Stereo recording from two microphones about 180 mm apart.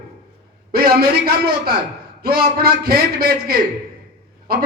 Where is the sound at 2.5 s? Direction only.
55° right (ahead or behind).